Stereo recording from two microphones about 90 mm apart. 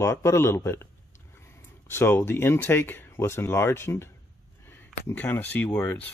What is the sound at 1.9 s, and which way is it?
Speech, 25° left (ahead or behind).